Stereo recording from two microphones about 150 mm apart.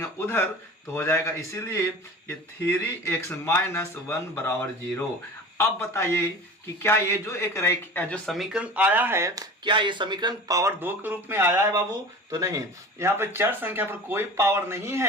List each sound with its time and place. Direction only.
0.0 s a sound: 15° left (ahead or behind)
0.9 s speech: 20° left (ahead or behind)
8.3 s speech: 5° right (ahead or behind)